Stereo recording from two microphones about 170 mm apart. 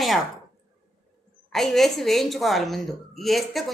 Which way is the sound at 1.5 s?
Centre (ahead or behind).